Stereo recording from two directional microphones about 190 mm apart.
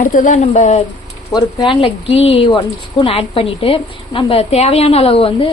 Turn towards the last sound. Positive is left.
turn(degrees=30)  # may be behind; listen again after turning